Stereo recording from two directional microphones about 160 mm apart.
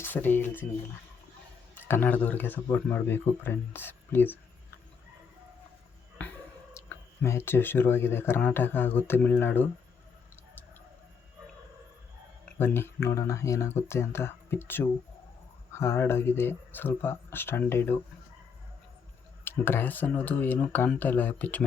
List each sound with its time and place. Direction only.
0.0 s speech: 10° left (ahead or behind)
1.7 s speech: 10° left (ahead or behind)
6.2 s a sound: 10° left (ahead or behind)
6.7 s speech: 15° left (ahead or behind)
12.5 s speech: 15° left (ahead or behind)
19.5 s speech: 15° left (ahead or behind)